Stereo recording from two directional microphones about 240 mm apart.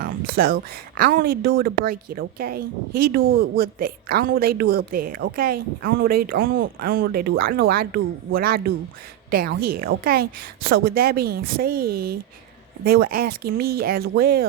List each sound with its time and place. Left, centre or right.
0.0 s a woman's voice: right